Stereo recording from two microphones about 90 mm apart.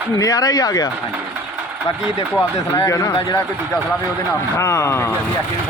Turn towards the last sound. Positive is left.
turn(degrees=30)  # may be behind; listen again after turning